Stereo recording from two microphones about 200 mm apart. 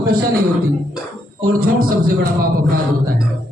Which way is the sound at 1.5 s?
50° right (ahead or behind).